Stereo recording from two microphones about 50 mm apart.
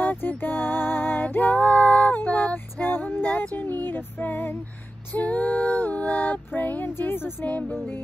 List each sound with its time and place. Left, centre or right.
0.0 s music: left
3.5 s a sound: left
5.1 s female singing: left
6.9 s music: left
7.4 s female singing: left